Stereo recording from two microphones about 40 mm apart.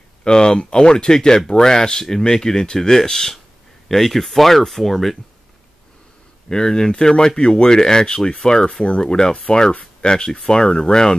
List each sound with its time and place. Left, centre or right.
0.2 s speech: left; by 5.1 s centre
6.5 s speech: centre